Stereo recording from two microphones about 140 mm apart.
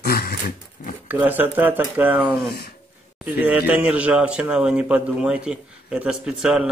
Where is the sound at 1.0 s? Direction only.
15° right (ahead or behind).